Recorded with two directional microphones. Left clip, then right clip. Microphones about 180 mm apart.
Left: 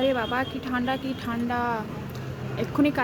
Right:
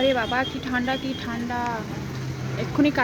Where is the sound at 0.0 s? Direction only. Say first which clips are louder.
Right 3 dB; 5° left (ahead or behind).